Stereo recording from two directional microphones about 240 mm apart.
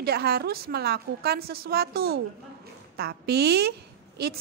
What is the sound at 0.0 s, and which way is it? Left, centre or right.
A woman's voice, right.